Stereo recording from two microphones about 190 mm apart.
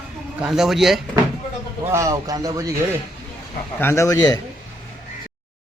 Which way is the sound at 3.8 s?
15° left (ahead or behind).